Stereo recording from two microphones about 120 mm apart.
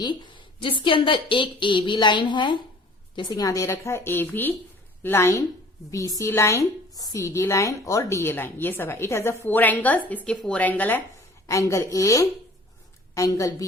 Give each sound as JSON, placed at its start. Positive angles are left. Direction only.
{"t": 0.0, "sound": "a woman's voice", "side_deg": 40}
{"t": 11.4, "sound": "a woman's voice", "side_deg": 25}